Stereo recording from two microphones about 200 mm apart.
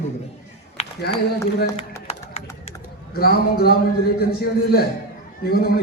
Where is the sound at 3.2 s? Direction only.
50° left (ahead or behind).